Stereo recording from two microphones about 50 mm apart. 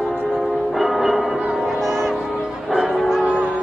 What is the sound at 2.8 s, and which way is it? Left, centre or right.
Music, centre.